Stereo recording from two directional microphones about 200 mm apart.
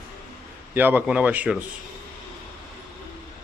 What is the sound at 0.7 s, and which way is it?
Speech, 10° right (ahead or behind).